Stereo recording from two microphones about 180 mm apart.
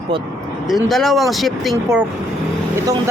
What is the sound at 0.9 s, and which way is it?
Speech, centre (ahead or behind).